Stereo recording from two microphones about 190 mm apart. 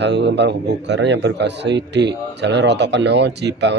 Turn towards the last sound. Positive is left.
turn(degrees=-65)  # may be behind; listen again after turning